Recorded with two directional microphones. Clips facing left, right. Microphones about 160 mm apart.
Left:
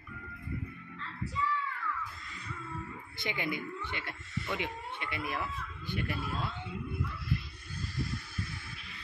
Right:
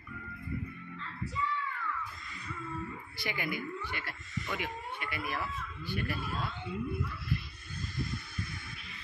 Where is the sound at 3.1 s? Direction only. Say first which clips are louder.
Left 2 dB; 20° left (ahead or behind).